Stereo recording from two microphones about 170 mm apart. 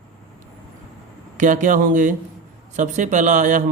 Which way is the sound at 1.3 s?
50° right (ahead or behind).